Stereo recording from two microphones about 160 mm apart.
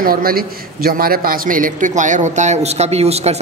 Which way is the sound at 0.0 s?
65° right (ahead or behind).